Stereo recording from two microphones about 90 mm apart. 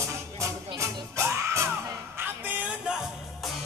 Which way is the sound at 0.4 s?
35° right (ahead or behind).